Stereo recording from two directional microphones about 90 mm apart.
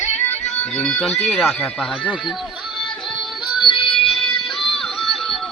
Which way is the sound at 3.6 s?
70° left (ahead or behind).